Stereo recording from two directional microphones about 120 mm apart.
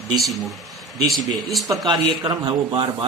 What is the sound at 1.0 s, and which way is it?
Speech, centre (ahead or behind).